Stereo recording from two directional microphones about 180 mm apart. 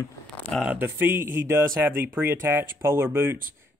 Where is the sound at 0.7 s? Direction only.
10° right (ahead or behind).